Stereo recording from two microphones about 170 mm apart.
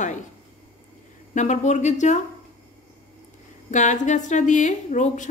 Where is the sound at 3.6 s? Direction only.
45° left (ahead or behind).